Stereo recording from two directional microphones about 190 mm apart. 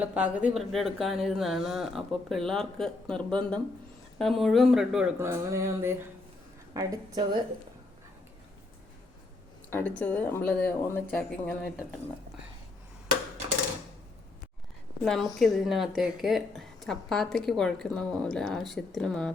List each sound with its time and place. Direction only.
0.0 s speech: 10° right (ahead or behind)
5.2 s a sound: 15° right (ahead or behind)
6.7 s a woman's voice: 20° right (ahead or behind)
9.6 s speech: 10° left (ahead or behind)
15.0 s speech: centre (ahead or behind)